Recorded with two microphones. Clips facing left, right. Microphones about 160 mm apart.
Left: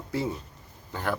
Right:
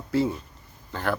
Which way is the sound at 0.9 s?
15° left (ahead or behind).